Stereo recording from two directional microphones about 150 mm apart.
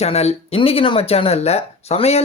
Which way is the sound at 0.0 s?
45° left (ahead or behind).